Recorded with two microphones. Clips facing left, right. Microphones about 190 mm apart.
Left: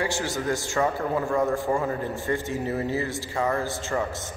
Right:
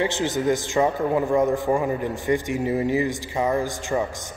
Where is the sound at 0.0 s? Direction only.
20° right (ahead or behind).